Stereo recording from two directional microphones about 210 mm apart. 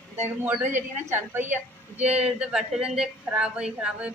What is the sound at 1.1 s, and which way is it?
A woman's voice, 10° right (ahead or behind).